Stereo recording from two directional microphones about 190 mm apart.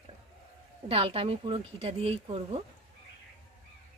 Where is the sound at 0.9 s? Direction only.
30° right (ahead or behind).